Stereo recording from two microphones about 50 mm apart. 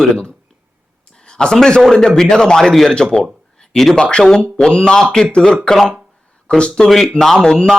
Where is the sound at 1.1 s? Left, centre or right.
Centre.